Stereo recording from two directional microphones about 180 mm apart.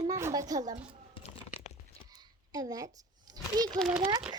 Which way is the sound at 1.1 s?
35° left (ahead or behind).